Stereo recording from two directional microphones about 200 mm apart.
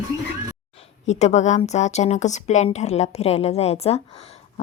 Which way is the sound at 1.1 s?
35° left (ahead or behind).